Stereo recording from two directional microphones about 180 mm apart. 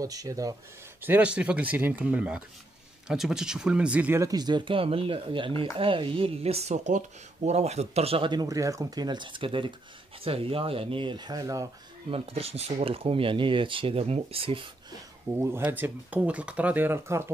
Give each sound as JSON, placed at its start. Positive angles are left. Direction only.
{"t": 0.0, "sound": "speech", "side_deg": -20}
{"t": 1.0, "sound": "speech", "side_deg": -10}
{"t": 12.1, "sound": "speech", "side_deg": -35}
{"t": 15.3, "sound": "speech", "side_deg": -15}